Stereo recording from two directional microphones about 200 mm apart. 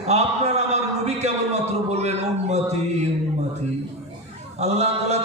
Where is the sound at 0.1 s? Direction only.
35° right (ahead or behind).